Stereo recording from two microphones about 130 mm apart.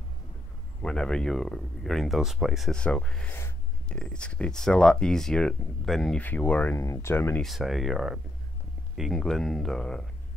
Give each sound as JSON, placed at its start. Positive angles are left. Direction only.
{"t": 0.8, "sound": "speech", "side_deg": 5}
{"t": 3.3, "sound": "a sound", "side_deg": 15}
{"t": 4.0, "sound": "speech", "side_deg": 5}
{"t": 7.4, "sound": "speech", "side_deg": 0}